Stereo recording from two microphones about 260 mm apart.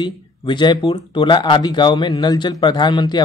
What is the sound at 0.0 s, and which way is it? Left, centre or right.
Speech, centre.